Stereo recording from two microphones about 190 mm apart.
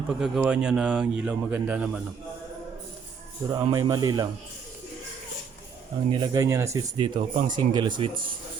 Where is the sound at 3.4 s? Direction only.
20° right (ahead or behind).